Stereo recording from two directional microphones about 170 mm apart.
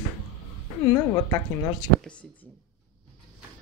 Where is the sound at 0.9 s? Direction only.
15° left (ahead or behind).